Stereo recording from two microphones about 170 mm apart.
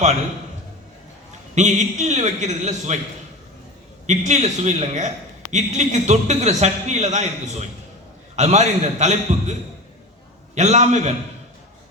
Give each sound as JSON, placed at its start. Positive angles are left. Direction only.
{"t": 1.5, "sound": "a man's voice", "side_deg": -45}
{"t": 4.0, "sound": "a man's voice", "side_deg": -45}